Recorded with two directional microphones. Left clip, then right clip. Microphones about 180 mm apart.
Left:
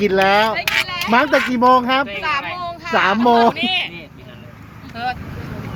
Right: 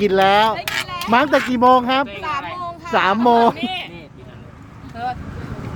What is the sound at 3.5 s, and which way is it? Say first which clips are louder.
Speech: left 5 dB; 40° right (ahead or behind).